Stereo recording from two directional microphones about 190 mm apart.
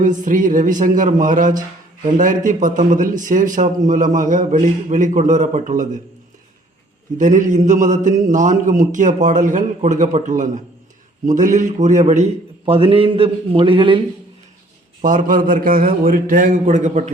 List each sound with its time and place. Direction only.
0.0 s speech: 45° right (ahead or behind)
7.2 s a man's voice: 40° right (ahead or behind); by 14.0 s 25° right (ahead or behind)
15.0 s speech: 45° right (ahead or behind)